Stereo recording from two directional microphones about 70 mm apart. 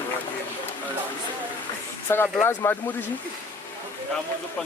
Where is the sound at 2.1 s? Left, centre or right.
Left.